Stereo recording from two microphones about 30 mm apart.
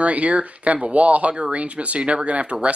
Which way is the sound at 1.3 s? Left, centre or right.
Right.